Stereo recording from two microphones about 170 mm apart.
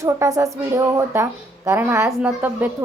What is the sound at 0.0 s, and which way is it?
A woman's voice, 20° right (ahead or behind).